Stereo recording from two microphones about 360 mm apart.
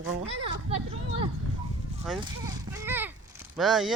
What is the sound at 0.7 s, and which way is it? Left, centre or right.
Speech, centre.